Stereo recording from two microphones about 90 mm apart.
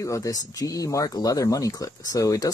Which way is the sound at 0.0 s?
35° left (ahead or behind).